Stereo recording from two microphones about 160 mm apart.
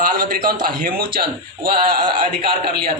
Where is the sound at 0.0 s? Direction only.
60° right (ahead or behind).